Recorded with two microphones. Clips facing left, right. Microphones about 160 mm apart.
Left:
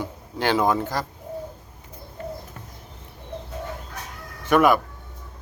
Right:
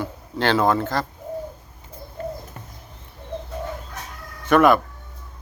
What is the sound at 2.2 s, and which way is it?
Bird, 40° right (ahead or behind).